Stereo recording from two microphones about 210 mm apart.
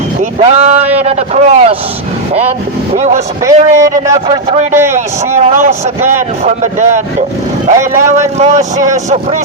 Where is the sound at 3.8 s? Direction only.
15° right (ahead or behind).